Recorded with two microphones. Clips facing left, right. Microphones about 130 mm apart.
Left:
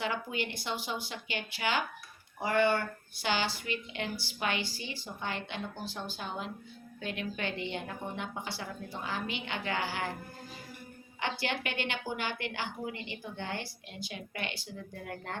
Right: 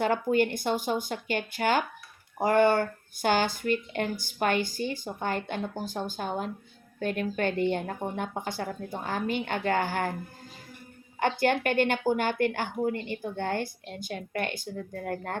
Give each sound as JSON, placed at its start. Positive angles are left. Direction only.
{"t": 0.0, "sound": "a woman's voice", "side_deg": -50}
{"t": 11.2, "sound": "a woman's voice", "side_deg": -50}